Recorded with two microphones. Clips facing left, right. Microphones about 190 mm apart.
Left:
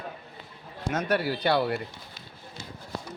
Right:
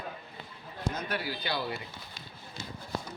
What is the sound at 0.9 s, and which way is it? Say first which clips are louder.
Speech: left 8 dB; 80° left.